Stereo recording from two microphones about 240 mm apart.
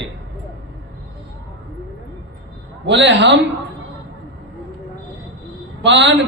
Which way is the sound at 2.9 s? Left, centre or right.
Right.